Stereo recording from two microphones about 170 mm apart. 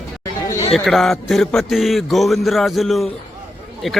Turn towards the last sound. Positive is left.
turn(degrees=0)  # may be behind; listen again after turning